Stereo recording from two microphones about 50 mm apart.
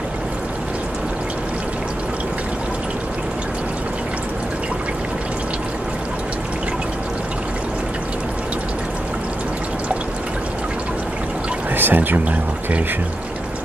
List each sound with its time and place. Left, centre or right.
11.7 s speech: right